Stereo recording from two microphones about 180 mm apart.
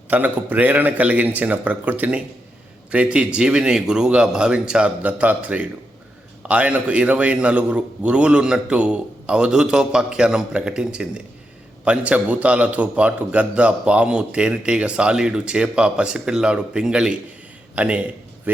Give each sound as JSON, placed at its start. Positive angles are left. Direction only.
{"t": 0.1, "sound": "a man's voice", "side_deg": -10}